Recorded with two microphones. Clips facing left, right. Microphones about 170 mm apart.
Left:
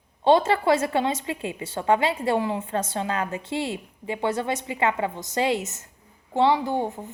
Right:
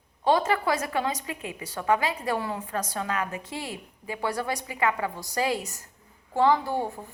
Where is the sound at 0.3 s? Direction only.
25° left (ahead or behind).